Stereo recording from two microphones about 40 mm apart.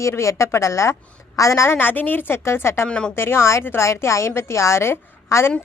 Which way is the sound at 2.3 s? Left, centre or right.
Left.